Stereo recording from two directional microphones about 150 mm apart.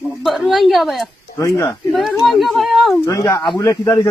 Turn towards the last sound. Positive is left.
turn(degrees=20)  # may be behind; listen again after turning